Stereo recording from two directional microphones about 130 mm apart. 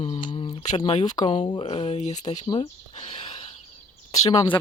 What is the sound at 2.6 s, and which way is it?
Speech, 55° left (ahead or behind).